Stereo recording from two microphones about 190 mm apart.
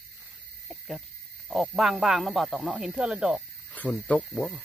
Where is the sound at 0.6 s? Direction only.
Centre (ahead or behind).